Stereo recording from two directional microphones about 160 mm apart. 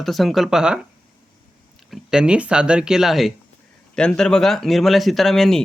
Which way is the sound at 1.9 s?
5° right (ahead or behind).